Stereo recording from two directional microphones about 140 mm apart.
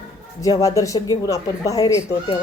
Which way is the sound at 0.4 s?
25° left (ahead or behind).